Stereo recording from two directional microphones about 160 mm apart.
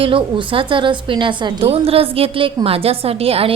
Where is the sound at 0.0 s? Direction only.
35° right (ahead or behind).